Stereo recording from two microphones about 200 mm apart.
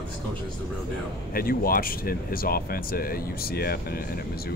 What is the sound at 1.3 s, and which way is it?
Speech, 45° left (ahead or behind).